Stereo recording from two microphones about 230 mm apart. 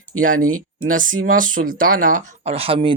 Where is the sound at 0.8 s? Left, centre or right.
Right.